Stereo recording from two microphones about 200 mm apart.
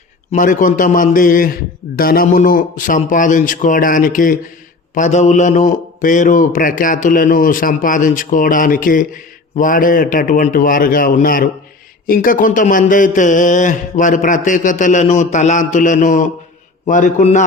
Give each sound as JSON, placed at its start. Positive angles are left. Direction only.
{"t": 0.3, "sound": "a man's voice", "side_deg": 40}